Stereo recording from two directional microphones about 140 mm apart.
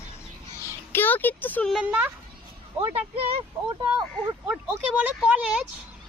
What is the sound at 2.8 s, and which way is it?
Speech, 40° right (ahead or behind).